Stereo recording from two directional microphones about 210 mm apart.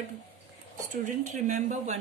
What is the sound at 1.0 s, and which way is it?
Speech, 35° right (ahead or behind).